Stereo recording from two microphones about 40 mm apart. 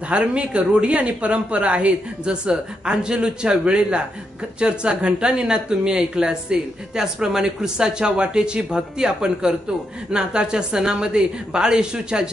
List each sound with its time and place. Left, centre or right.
0.1 s speech: right